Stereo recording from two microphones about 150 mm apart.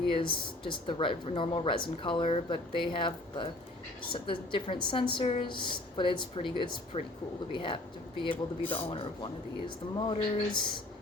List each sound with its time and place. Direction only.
0.1 s speech: 35° left (ahead or behind)
8.6 s speech: 10° left (ahead or behind)
8.9 s speech: 30° left (ahead or behind)